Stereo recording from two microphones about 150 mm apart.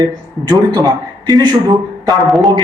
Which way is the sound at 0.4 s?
25° right (ahead or behind).